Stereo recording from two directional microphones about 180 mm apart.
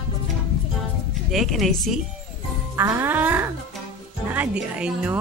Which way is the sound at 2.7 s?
15° right (ahead or behind).